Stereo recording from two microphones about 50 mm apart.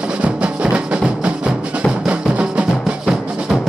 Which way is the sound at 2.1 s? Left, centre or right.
Right.